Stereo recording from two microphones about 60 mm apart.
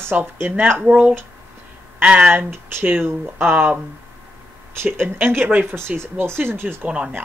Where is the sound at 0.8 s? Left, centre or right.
Right.